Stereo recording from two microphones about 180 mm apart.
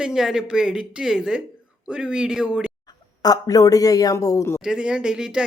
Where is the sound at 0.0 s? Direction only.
5° right (ahead or behind).